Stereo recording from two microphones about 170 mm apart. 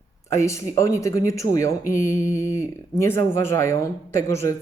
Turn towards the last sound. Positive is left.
turn(degrees=15)  # may be behind; listen again after turning